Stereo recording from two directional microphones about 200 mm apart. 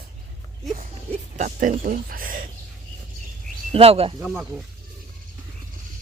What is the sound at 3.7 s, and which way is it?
Speech, 30° right (ahead or behind).